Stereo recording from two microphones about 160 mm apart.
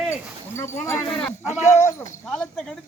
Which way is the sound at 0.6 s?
15° left (ahead or behind).